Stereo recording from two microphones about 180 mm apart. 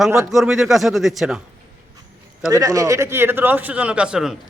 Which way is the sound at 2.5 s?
20° right (ahead or behind).